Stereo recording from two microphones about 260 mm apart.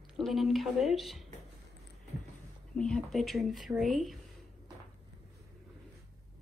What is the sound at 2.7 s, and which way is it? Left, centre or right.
Speech, centre.